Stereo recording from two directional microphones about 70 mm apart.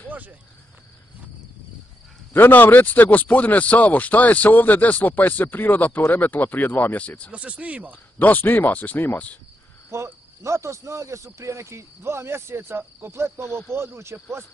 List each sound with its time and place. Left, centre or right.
0.1 s cricket: right
2.3 s speech: left
7.2 s speech: centre
8.2 s speech: left
9.8 s speech: right